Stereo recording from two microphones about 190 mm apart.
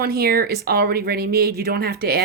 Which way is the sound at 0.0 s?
55° right (ahead or behind).